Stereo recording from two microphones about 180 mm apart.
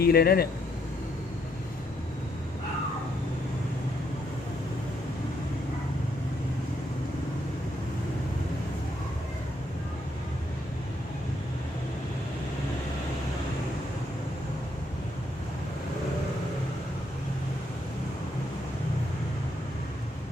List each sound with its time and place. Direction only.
0.0 s speech: 60° left (ahead or behind)